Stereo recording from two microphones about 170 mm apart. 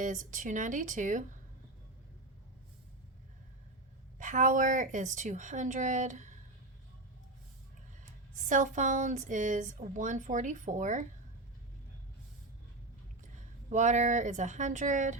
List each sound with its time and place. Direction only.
0.0 s a woman's voice: 50° right (ahead or behind)
4.2 s a woman's voice: 50° right (ahead or behind)
8.4 s a woman's voice: 50° right (ahead or behind)
13.3 s speech: 45° right (ahead or behind)